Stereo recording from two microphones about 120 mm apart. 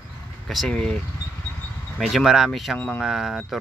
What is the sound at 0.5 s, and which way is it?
Speech, 5° left (ahead or behind).